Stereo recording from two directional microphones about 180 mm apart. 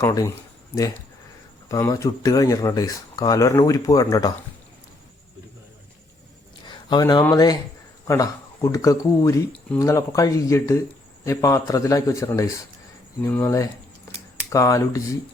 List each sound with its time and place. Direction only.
0.0 s speech: 20° left (ahead or behind)
1.7 s speech: 20° left (ahead or behind)
6.7 s speech: 25° left (ahead or behind)